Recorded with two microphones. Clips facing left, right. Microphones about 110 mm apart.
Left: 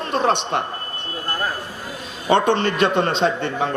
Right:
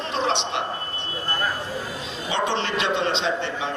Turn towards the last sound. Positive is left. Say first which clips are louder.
# left 5 dB
turn(degrees=50)  # may be behind; listen again after turning